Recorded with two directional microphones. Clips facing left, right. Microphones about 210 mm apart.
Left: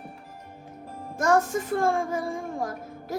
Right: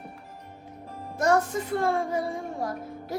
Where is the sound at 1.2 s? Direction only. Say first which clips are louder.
Left 1 dB; 45° left (ahead or behind).